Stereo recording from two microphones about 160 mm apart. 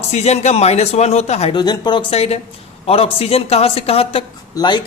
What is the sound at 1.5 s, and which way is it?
Speech, 25° left (ahead or behind).